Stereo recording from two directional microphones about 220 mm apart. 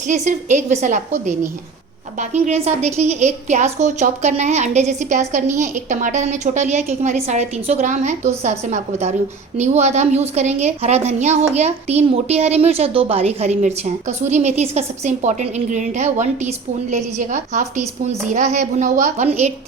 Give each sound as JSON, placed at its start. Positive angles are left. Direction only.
{"t": 0.1, "sound": "a woman's voice", "side_deg": -35}